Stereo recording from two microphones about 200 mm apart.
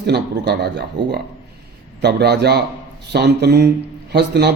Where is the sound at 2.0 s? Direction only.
55° right (ahead or behind).